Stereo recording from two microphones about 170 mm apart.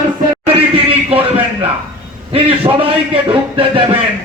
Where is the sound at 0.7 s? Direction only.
35° right (ahead or behind).